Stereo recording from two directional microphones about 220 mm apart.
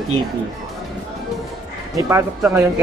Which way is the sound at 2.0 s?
10° right (ahead or behind).